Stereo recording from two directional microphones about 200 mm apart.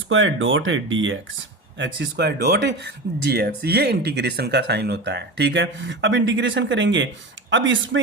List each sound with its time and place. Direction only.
0.1 s speech: 75° right (ahead or behind)
1.8 s speech: 60° right (ahead or behind)